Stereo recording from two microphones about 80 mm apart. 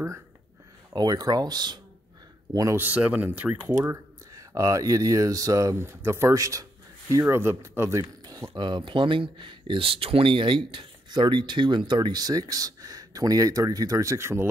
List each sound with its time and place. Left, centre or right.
0.9 s speech: right
2.7 s speech: right
3.7 s speech: right
5.8 s speech: right
8.0 s speech: right